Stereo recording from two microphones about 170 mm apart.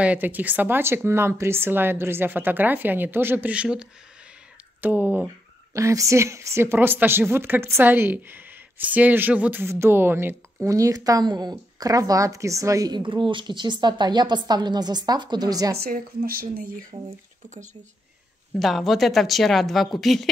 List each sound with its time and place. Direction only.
0.0 s speech: 10° right (ahead or behind)
15.7 s speech: 60° right (ahead or behind)
18.5 s a woman's voice: centre (ahead or behind)